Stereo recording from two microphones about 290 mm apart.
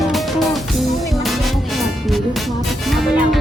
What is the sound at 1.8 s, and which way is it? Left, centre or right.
Music, centre.